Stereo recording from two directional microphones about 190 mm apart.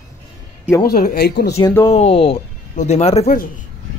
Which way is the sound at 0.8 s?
50° left (ahead or behind).